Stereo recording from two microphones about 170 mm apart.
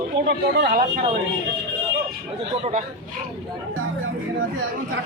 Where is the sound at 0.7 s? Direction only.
50° right (ahead or behind).